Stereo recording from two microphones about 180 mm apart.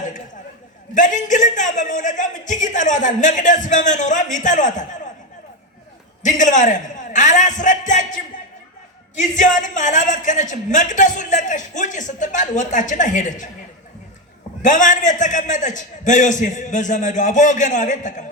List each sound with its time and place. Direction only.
0.9 s a man's voice: 45° left (ahead or behind)
6.2 s a man's voice: 45° left (ahead or behind)
14.6 s a man's voice: 45° left (ahead or behind)